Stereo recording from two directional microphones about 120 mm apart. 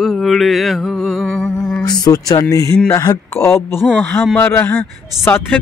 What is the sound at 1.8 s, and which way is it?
A man's voice, 35° left (ahead or behind).